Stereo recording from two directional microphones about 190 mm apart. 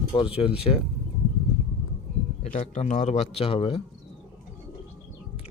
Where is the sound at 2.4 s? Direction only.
35° left (ahead or behind).